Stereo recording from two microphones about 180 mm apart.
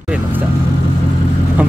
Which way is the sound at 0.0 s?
10° right (ahead or behind).